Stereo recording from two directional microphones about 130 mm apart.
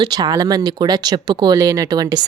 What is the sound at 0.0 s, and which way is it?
Speech, 30° right (ahead or behind).